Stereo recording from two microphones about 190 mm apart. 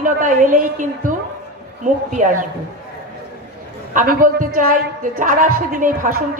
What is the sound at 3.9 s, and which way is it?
A woman's voice, 45° right (ahead or behind).